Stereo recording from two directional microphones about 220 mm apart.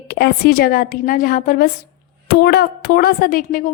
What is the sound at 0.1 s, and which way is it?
A woman's voice, 45° left (ahead or behind).